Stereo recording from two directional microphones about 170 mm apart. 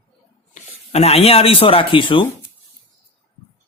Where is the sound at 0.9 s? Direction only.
40° left (ahead or behind).